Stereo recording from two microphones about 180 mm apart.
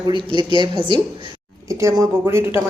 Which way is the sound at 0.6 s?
25° right (ahead or behind).